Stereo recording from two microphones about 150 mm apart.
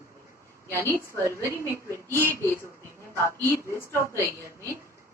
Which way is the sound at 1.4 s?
20° right (ahead or behind).